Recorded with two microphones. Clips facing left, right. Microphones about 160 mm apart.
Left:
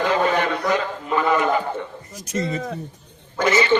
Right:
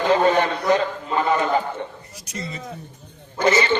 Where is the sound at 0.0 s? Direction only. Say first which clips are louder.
Right 2 dB; 30° right (ahead or behind).